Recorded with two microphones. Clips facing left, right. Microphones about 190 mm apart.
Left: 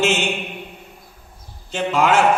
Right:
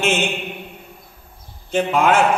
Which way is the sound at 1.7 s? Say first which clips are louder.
Right 1 dB; 55° right (ahead or behind).